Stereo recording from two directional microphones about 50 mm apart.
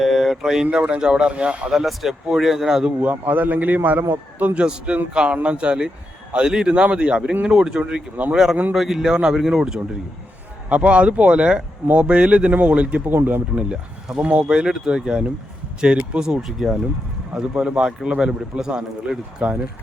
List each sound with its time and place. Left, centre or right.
0.0 s speech: centre; by 1.5 s right
1.7 s speech: centre
3.0 s a man's voice: right
4.5 s a man's voice: right
10.7 s speech: right
13.1 s a man's voice: right
13.7 s speech: centre
16.2 s speech: centre